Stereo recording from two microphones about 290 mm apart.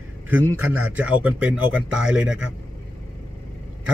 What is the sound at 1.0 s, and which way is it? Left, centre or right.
Speech, centre.